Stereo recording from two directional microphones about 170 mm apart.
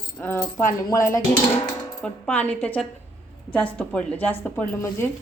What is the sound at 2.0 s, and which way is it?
Speech, 10° left (ahead or behind).